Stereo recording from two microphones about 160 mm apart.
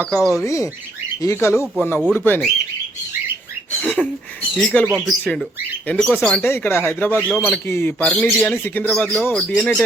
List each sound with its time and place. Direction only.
0.1 s speech: centre (ahead or behind)
0.4 s speech: 20° left (ahead or behind)
3.8 s a sound: 5° left (ahead or behind)
4.5 s speech: 5° left (ahead or behind)
5.9 s speech: 5° left (ahead or behind)